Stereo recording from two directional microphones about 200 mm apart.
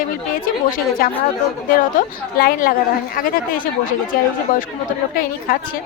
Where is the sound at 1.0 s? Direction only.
45° left (ahead or behind).